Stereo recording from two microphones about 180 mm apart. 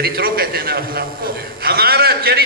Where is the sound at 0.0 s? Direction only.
55° right (ahead or behind).